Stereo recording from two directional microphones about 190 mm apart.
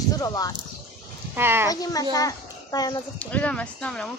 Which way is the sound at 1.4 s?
10° right (ahead or behind).